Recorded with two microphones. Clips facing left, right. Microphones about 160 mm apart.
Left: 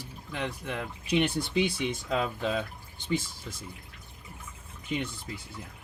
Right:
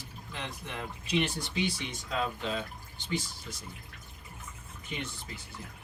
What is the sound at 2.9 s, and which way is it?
Speech, 50° left (ahead or behind).